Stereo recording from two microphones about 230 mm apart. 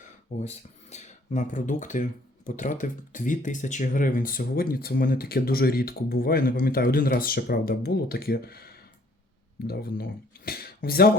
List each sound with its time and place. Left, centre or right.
0.3 s speech: left